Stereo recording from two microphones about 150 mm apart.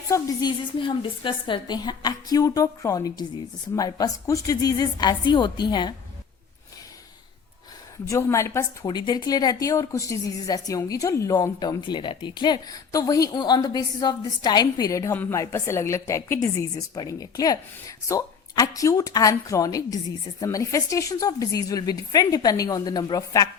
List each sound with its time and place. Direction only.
0.1 s a woman's voice: 25° left (ahead or behind)
8.0 s a woman's voice: 20° left (ahead or behind)